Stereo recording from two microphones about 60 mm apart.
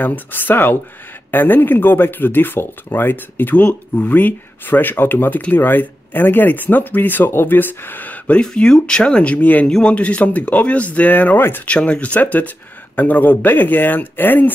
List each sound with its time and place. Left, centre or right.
0.0 s speech: left
8.4 s speech: centre
9.4 s speech: left
9.7 s speech: centre
9.9 s speech: left